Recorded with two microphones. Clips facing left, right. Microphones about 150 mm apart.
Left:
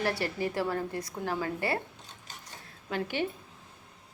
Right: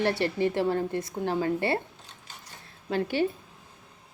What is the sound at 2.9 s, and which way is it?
Speech, 35° right (ahead or behind).